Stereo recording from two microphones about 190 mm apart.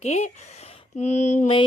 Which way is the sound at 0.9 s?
35° left (ahead or behind).